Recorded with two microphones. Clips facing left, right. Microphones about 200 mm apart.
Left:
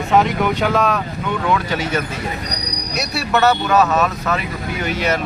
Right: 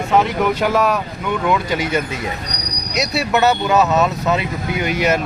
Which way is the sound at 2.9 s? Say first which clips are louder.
Right 2 dB; 20° right (ahead or behind).